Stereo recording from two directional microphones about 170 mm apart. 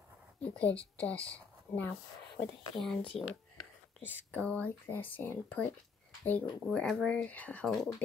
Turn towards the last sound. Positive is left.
turn(degrees=5)  # may be behind; listen again after turning